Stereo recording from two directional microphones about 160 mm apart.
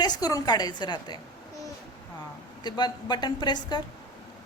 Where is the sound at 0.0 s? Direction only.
25° left (ahead or behind).